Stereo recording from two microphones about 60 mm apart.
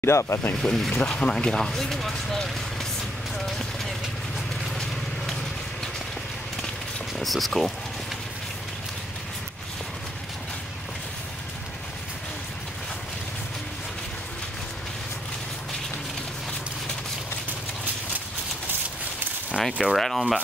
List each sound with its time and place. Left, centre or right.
0.0 s speech: left
0.6 s speech: centre
3.3 s a sound: centre
7.2 s speech: centre
19.6 s speech: centre